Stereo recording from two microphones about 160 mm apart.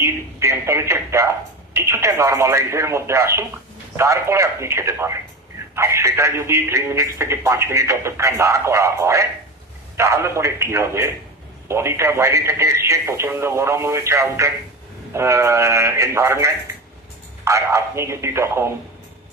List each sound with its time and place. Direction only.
0.0 s speech: 15° right (ahead or behind)